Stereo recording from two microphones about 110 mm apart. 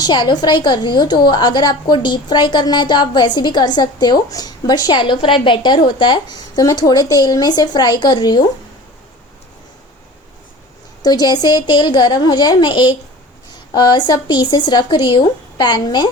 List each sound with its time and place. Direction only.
0.0 s a woman's voice: 40° left (ahead or behind)
11.0 s a woman's voice: 35° left (ahead or behind)